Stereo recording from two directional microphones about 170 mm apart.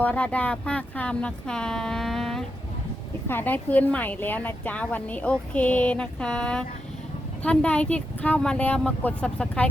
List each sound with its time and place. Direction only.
0.0 s a woman's voice: 10° left (ahead or behind)